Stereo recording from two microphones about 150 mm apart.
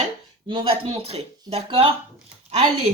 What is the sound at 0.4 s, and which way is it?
Speech, 35° right (ahead or behind).